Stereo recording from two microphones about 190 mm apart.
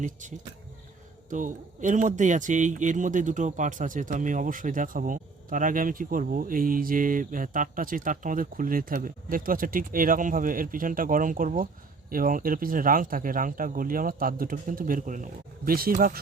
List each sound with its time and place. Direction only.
0.0 s speech: 40° right (ahead or behind)